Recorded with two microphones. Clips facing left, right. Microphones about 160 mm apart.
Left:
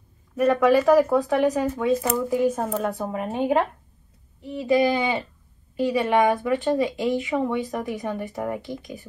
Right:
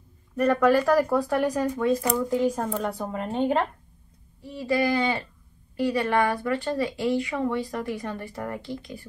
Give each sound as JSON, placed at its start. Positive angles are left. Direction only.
{"t": 0.4, "sound": "speech", "side_deg": 5}